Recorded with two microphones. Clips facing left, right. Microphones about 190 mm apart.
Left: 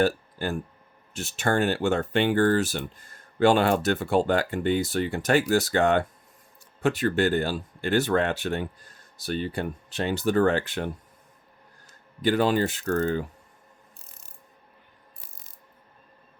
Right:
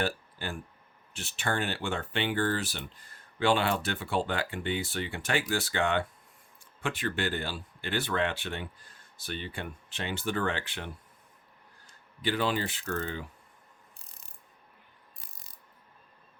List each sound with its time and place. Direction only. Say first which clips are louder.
0.0 s speech: left 8 dB; 40° left (ahead or behind)
12.2 s speech: left 7 dB; 45° left (ahead or behind)